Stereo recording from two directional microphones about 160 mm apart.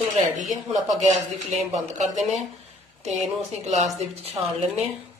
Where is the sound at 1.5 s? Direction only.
45° right (ahead or behind).